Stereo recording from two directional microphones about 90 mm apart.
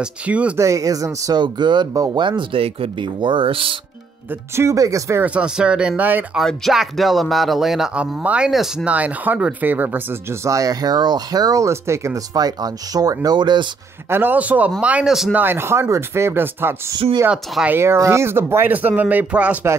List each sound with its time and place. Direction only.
0.0 s speech: 15° right (ahead or behind)
0.6 s speech: 35° right (ahead or behind)
1.3 s speech: 55° right (ahead or behind); by 3.7 s 80° right
4.6 s speech: 35° right (ahead or behind)
5.2 s speech: 15° right (ahead or behind)
6.3 s speech: centre (ahead or behind); by 10.0 s 20° right (ahead or behind)
10.4 s speech: 40° right (ahead or behind)
12.4 s speech: 45° right (ahead or behind)
14.1 s speech: 20° right (ahead or behind)
15.3 s speech: 25° right (ahead or behind)
17.3 s speech: 15° right (ahead or behind)
17.7 s speech: 30° right (ahead or behind); by 19.6 s 15° right (ahead or behind)